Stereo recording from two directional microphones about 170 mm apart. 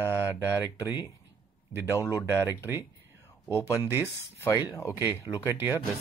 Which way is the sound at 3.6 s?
15° left (ahead or behind).